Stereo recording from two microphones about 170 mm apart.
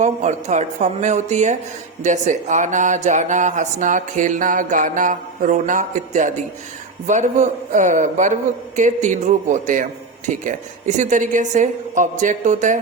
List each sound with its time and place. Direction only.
0.0 s speech: 45° right (ahead or behind)